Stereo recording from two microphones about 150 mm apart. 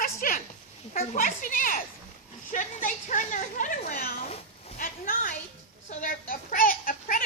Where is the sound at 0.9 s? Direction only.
60° left (ahead or behind).